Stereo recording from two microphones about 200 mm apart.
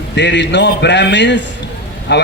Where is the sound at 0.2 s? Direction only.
60° left (ahead or behind).